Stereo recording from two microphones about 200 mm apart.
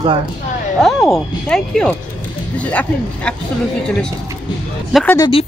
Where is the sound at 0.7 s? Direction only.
Centre (ahead or behind).